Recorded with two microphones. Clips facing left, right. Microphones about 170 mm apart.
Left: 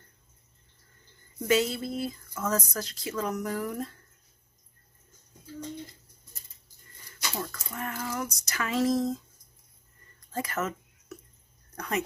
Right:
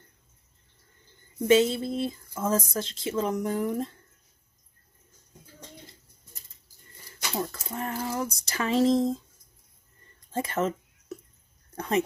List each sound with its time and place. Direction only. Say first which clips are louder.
1.4 s speech: right 5 dB; 25° right (ahead or behind)
7.1 s speech: right 4 dB; 25° right (ahead or behind)
10.3 s a sound: right 4 dB; 25° right (ahead or behind)